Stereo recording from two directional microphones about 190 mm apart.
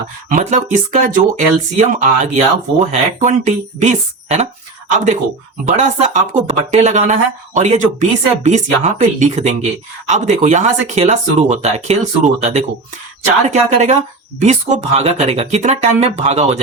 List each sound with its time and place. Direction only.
0.3 s speech: 40° right (ahead or behind)
5.6 s speech: 35° right (ahead or behind)